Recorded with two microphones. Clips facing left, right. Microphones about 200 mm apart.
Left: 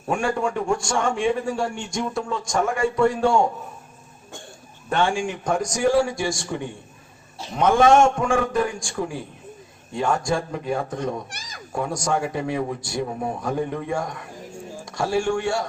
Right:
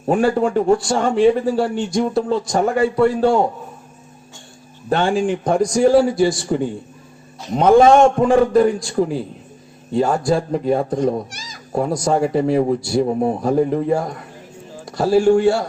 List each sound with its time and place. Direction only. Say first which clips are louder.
0.1 s a man's voice: right 7 dB; 35° right (ahead or behind)
4.9 s a man's voice: right 5 dB; 35° right (ahead or behind)
11.3 s a sound: right 4 dB; 60° left (ahead or behind)
11.7 s a man's voice: right 6 dB; 40° right (ahead or behind)